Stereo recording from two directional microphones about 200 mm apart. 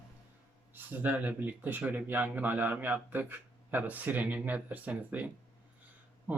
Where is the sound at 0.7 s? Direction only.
10° right (ahead or behind).